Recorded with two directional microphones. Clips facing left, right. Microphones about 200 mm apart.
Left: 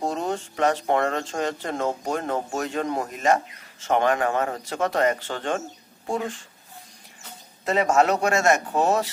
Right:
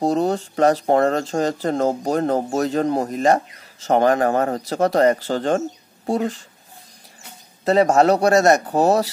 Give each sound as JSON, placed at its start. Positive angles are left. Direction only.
{"t": 0.0, "sound": "speech", "side_deg": -35}
{"t": 7.6, "sound": "speech", "side_deg": -35}